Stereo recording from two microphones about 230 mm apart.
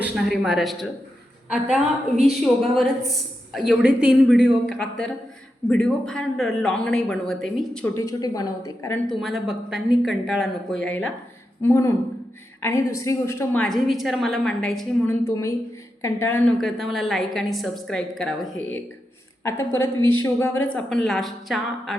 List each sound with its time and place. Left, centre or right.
0.0 s a man's voice: centre
4.6 s a man's voice: left
5.6 s a man's voice: centre
9.2 s a man's voice: centre
15.2 s a woman's voice: centre
19.8 s speech: left
20.2 s a woman's voice: centre